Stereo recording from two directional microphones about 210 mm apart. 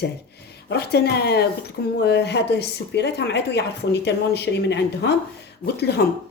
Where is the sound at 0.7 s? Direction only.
50° left (ahead or behind).